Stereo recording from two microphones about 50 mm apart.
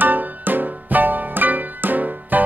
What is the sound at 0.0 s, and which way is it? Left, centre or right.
Music, right.